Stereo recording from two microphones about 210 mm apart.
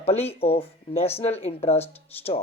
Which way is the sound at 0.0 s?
30° left (ahead or behind).